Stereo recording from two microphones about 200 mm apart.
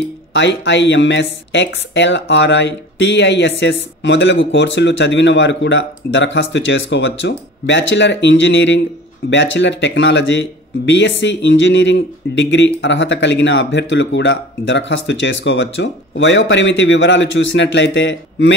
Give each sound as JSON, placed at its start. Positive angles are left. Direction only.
{"t": 0.3, "sound": "speech", "side_deg": 65}